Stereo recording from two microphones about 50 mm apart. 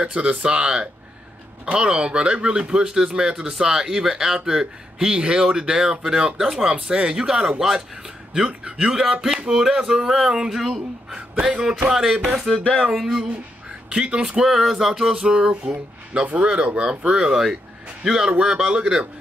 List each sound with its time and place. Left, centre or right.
0.0 s speech: right; by 13.3 s centre
13.8 s speech: centre